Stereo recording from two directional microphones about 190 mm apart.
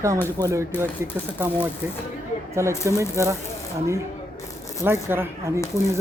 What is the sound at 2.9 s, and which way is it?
Speech, 15° right (ahead or behind).